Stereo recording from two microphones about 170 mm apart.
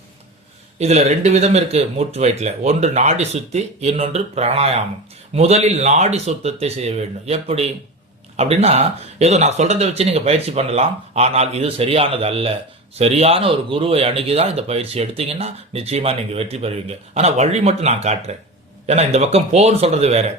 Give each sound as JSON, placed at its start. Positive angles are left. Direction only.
{"t": 0.8, "sound": "speech", "side_deg": -40}